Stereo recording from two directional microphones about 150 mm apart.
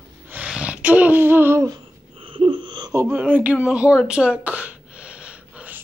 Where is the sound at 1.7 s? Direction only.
35° right (ahead or behind).